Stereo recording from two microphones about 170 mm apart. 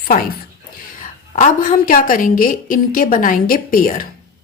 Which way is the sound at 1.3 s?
50° left (ahead or behind).